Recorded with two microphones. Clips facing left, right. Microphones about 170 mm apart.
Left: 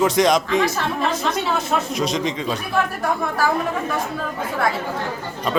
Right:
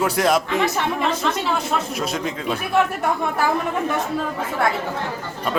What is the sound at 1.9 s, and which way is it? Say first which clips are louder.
Speech: left 3 dB; 5° right (ahead or behind).